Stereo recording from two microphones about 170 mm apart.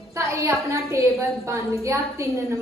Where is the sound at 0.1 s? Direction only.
20° right (ahead or behind).